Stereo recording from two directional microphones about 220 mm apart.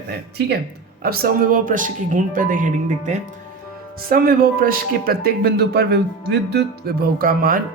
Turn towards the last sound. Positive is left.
turn(degrees=-40)  # may be behind; listen again after turning